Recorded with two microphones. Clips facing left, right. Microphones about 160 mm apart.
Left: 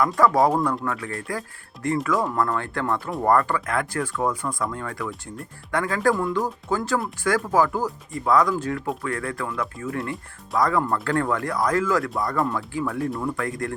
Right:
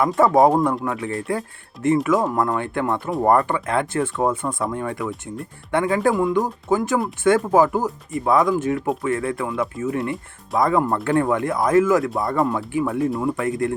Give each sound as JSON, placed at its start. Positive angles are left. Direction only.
{"t": 0.2, "sound": "speech", "side_deg": -25}